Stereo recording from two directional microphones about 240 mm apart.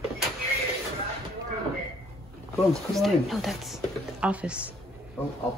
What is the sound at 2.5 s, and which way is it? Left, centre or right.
Speech, centre.